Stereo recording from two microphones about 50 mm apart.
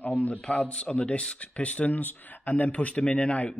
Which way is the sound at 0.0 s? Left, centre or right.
Left.